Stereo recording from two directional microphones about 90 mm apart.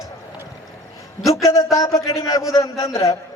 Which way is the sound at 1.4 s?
35° left (ahead or behind).